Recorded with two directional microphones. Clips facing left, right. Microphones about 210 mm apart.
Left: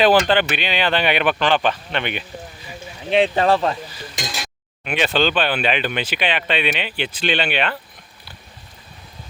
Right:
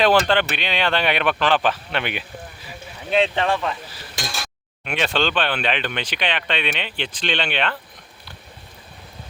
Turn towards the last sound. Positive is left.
turn(degrees=5)  # may be behind; listen again after turning